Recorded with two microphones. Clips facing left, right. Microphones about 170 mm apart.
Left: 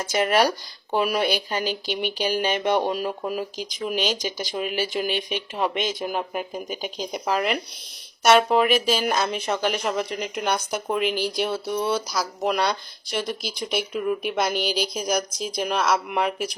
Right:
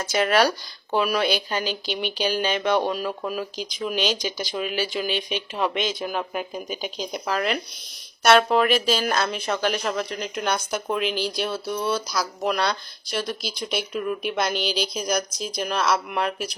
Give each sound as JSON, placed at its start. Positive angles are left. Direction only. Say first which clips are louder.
{"t": 0.0, "sound": "speech", "louder": "even", "side_deg": 15}